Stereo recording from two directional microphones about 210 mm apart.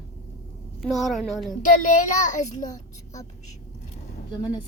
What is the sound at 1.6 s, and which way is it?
Child singing, 35° left (ahead or behind).